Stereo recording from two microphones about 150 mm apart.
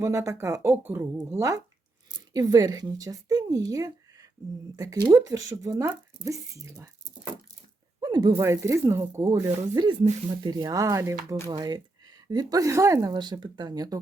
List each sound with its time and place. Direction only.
0.0 s a woman's voice: 20° right (ahead or behind)
8.0 s a sound: 25° right (ahead or behind)
8.3 s a woman's voice: 20° right (ahead or behind)